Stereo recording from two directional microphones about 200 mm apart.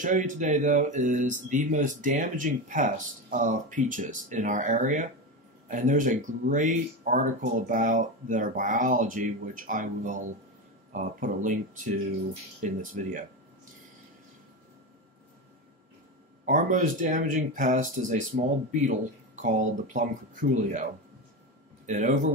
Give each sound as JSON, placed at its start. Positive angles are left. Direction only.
{"t": 0.0, "sound": "speech", "side_deg": -40}
{"t": 16.4, "sound": "speech", "side_deg": -40}